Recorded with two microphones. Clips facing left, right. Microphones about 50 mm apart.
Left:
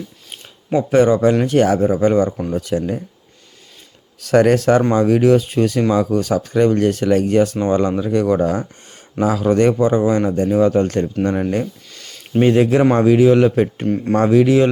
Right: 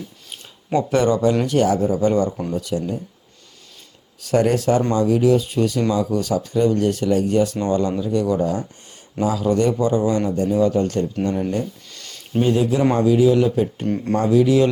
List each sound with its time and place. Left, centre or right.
0.7 s speech: centre
1.5 s speech: left
2.6 s speech: left
4.2 s speech: left
4.8 s speech: left
5.0 s speech: left
7.5 s speech: left
7.8 s speech: left
11.9 s a sound: centre
12.4 s speech: left
12.8 s speech: left
13.8 s speech: centre
14.2 s speech: left